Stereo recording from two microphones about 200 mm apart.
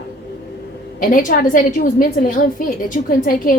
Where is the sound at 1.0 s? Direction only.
40° left (ahead or behind).